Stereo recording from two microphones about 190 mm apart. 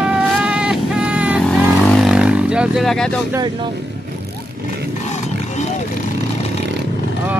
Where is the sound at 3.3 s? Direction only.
25° right (ahead or behind).